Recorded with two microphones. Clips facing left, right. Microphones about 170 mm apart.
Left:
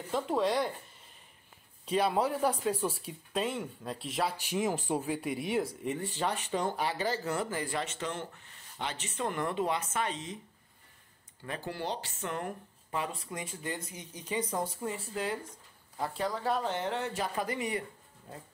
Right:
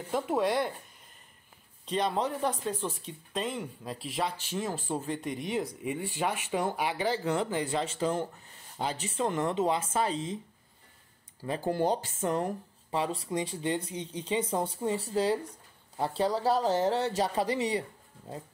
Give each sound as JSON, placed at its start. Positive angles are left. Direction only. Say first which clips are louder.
{"t": 0.1, "sound": "speech", "louder": "right 1 dB", "side_deg": -5}
{"t": 1.9, "sound": "speech", "louder": "left 1 dB", "side_deg": 5}
{"t": 4.4, "sound": "speech", "louder": "left 2 dB", "side_deg": 15}
{"t": 6.3, "sound": "speech", "louder": "right 2 dB", "side_deg": -10}
{"t": 9.2, "sound": "speech", "louder": "right 4 dB", "side_deg": -25}
{"t": 11.6, "sound": "speech", "louder": "right 9 dB", "side_deg": -45}